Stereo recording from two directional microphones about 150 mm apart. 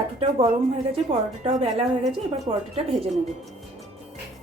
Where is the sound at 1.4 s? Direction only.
50° right (ahead or behind).